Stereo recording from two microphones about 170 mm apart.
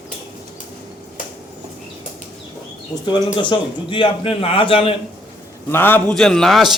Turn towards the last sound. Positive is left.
turn(degrees=0)  # may be behind; listen again after turning